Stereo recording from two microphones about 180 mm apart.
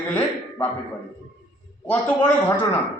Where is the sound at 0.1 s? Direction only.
10° left (ahead or behind).